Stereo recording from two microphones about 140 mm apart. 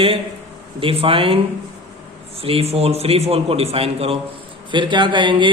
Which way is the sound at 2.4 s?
45° right (ahead or behind).